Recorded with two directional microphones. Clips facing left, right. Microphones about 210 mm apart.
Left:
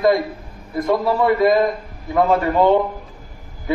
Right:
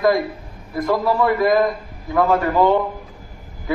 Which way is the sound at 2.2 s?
20° left (ahead or behind).